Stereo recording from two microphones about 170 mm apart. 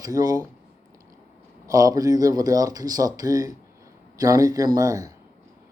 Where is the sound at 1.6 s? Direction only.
20° right (ahead or behind).